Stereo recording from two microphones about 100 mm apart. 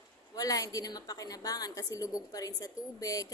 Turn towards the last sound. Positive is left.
turn(degrees=35)  # may be behind; listen again after turning